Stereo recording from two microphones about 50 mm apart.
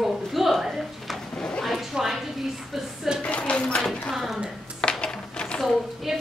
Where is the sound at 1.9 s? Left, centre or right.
Centre.